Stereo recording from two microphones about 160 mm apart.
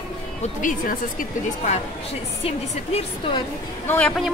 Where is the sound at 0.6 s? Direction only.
55° left (ahead or behind).